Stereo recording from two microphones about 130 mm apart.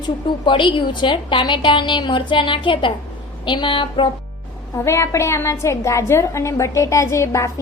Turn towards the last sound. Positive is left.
turn(degrees=25)  # may be behind; listen again after turning